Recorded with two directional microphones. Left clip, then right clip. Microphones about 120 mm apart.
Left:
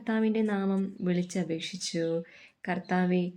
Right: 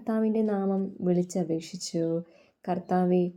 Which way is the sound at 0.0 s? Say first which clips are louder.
Right 2 dB; 30° right (ahead or behind).